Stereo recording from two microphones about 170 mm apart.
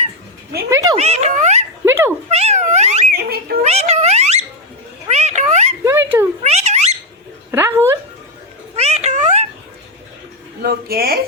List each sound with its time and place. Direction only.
0.7 s speech: 20° right (ahead or behind)
0.9 s speech: 40° right (ahead or behind)
1.8 s a sound: 15° right (ahead or behind)
2.3 s cat: 40° right (ahead or behind)
3.2 s children playing: 65° right (ahead or behind)
3.6 s cat: 40° right (ahead or behind)
5.0 s a sound: 40° right (ahead or behind)
5.8 s a sound: 15° right (ahead or behind)
6.4 s cat: 40° right (ahead or behind)
7.5 s speech: 15° right (ahead or behind)
8.7 s cat: 40° right (ahead or behind)
10.6 s speech: 65° right (ahead or behind)